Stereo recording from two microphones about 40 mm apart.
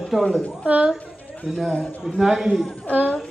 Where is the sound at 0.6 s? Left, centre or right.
Right.